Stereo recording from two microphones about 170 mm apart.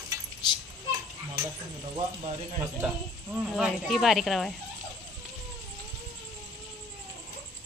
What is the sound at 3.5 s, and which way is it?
Speech, centre (ahead or behind).